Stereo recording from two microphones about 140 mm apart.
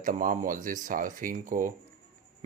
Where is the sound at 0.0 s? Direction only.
75° right (ahead or behind).